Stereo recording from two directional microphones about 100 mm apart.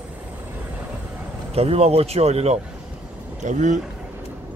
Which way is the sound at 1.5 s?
90° right.